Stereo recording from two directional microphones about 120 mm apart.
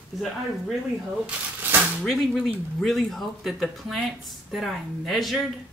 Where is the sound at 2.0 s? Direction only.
Centre (ahead or behind).